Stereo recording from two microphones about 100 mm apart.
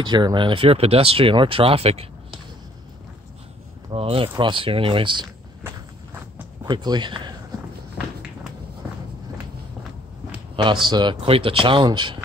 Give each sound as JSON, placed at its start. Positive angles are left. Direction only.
{"t": 0.0, "sound": "speech", "side_deg": -50}
{"t": 3.9, "sound": "speech", "side_deg": -70}
{"t": 4.4, "sound": "speech", "side_deg": -55}
{"t": 6.6, "sound": "speech", "side_deg": -45}
{"t": 10.5, "sound": "speech", "side_deg": -55}
{"t": 11.2, "sound": "speech", "side_deg": -65}